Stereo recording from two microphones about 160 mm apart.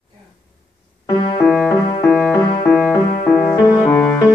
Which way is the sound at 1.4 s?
5° left (ahead or behind).